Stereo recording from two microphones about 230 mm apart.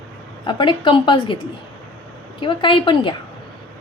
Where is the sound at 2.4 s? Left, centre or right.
Left.